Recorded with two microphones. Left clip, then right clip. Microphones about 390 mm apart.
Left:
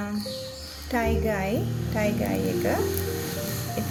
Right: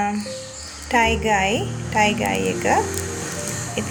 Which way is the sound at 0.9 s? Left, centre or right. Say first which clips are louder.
Right 9 dB; left.